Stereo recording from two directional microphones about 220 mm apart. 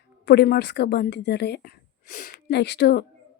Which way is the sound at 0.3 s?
45° left (ahead or behind).